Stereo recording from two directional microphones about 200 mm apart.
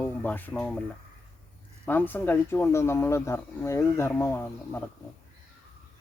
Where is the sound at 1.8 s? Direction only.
10° left (ahead or behind).